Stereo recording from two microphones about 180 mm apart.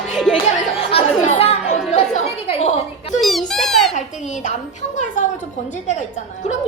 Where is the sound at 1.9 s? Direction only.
40° left (ahead or behind).